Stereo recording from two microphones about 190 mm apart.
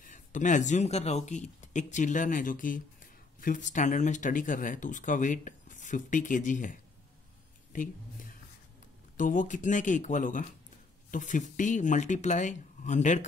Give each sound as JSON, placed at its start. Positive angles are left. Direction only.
{"t": 0.0, "sound": "speech", "side_deg": 40}